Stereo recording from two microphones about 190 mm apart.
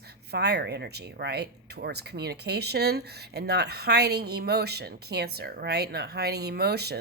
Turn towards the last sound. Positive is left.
turn(degrees=-60)  # may be behind; listen again after turning